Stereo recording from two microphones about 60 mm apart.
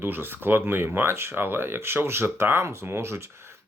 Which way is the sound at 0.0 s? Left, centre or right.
Right.